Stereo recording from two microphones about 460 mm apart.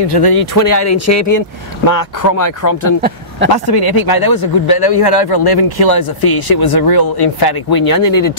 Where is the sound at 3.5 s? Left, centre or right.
Left.